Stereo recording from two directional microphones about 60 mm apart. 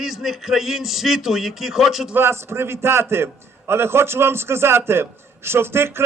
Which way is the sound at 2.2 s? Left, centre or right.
Right.